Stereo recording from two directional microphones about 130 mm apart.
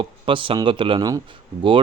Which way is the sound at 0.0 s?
40° right (ahead or behind).